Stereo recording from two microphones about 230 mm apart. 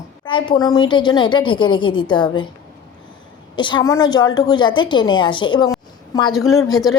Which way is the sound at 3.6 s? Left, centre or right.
Centre.